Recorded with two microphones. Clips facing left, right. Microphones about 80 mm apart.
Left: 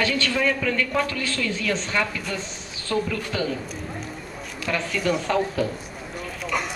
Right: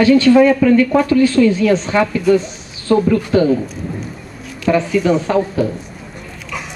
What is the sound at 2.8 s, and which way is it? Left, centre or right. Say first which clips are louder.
Speech: right 12 dB; right.